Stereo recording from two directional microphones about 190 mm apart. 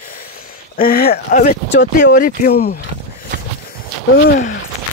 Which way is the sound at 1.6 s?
70° left (ahead or behind).